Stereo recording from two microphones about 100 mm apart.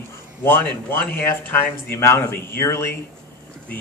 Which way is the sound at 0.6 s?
15° left (ahead or behind).